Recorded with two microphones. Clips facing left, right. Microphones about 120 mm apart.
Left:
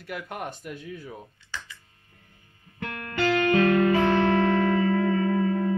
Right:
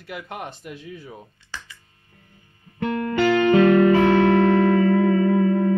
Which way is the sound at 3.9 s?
65° right (ahead or behind).